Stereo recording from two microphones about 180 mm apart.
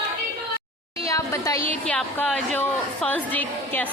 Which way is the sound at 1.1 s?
15° left (ahead or behind).